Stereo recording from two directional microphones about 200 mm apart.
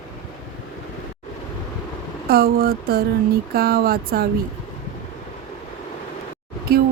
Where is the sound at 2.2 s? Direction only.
50° right (ahead or behind).